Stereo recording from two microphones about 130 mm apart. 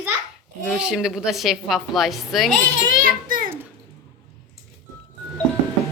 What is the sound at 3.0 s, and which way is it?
Speech, 90° right.